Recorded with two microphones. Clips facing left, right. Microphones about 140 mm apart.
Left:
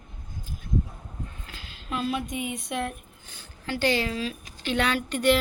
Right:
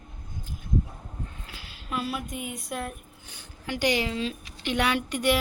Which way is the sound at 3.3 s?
15° right (ahead or behind).